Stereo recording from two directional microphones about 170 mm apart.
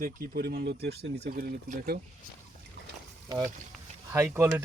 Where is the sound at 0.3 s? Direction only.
75° right (ahead or behind).